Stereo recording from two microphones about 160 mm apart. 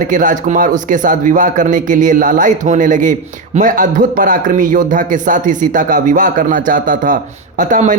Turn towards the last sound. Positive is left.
turn(degrees=-55)  # may be behind; listen again after turning